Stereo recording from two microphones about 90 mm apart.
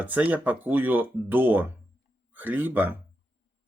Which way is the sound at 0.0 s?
15° right (ahead or behind).